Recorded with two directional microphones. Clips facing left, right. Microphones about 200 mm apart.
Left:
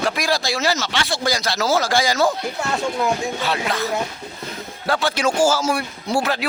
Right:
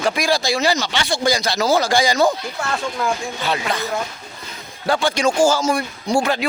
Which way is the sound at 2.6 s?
20° left (ahead or behind).